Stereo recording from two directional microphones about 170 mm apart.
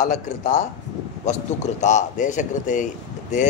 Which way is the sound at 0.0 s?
45° left (ahead or behind).